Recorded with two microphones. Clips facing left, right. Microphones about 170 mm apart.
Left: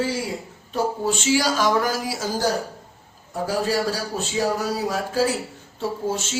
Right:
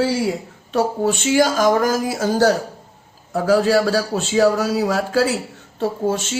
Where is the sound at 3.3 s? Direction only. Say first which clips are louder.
Right 8 dB; 85° right.